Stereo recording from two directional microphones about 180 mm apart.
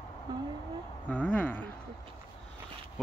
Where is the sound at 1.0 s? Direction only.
5° left (ahead or behind).